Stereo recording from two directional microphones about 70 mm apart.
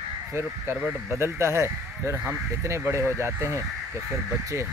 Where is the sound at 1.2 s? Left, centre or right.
Right.